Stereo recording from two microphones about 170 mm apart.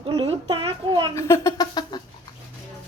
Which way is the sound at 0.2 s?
35° right (ahead or behind).